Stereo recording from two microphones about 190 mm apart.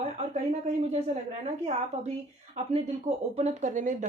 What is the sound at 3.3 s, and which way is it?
Speech, 35° right (ahead or behind).